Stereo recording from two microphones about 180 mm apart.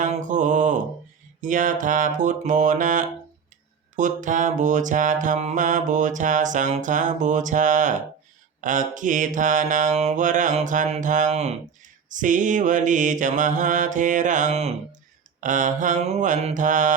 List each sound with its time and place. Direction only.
0.0 s mantra: 45° right (ahead or behind)